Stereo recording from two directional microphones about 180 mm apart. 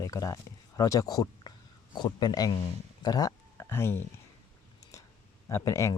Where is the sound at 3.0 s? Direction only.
20° left (ahead or behind).